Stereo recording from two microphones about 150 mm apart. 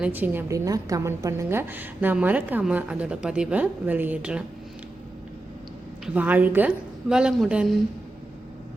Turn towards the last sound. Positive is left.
turn(degrees=-5)  # may be behind; listen again after turning